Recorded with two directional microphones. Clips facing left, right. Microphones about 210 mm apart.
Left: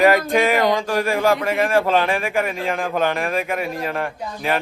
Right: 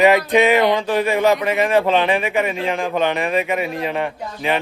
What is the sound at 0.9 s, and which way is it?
A man's voice, centre (ahead or behind).